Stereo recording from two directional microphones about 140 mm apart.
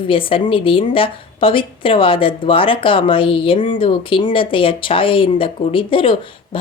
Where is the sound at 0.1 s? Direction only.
40° left (ahead or behind).